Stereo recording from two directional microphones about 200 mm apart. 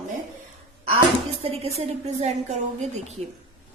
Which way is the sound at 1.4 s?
30° right (ahead or behind).